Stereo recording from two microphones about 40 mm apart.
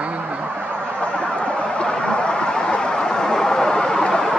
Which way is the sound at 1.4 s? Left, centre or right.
Left.